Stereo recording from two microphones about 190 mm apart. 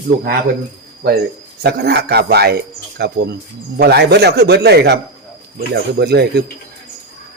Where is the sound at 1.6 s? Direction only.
60° right (ahead or behind).